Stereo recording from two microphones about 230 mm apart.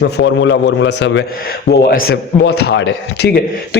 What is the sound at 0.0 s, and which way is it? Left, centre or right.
Speech, left.